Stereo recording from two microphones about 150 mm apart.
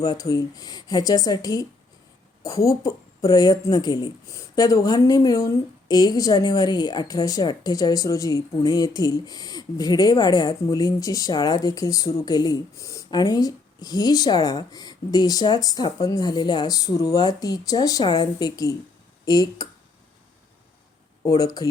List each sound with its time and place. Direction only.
0.0 s a woman's voice: 25° left (ahead or behind)
21.2 s a woman's voice: 25° left (ahead or behind)